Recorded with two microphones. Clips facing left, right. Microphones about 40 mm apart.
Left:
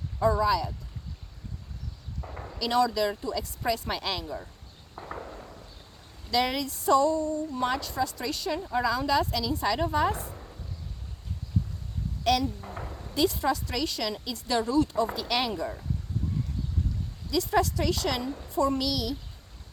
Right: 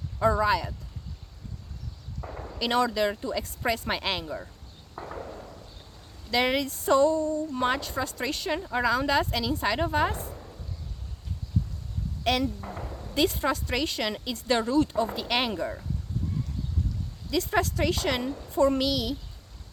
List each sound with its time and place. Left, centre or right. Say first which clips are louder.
0.2 s a woman's voice: right 1 dB; right
2.3 s a sound: right 1 dB; centre
2.6 s a woman's voice: even; right
6.3 s a woman's voice: right 2 dB; right
12.2 s a woman's voice: left 1 dB; right
17.3 s a woman's voice: left 1 dB; right